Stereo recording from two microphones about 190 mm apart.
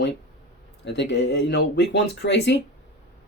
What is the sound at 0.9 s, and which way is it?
Speech, 70° left (ahead or behind).